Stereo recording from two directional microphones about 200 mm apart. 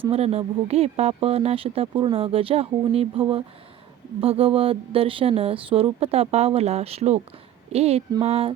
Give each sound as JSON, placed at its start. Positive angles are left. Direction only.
{"t": 0.0, "sound": "a woman's voice", "side_deg": -30}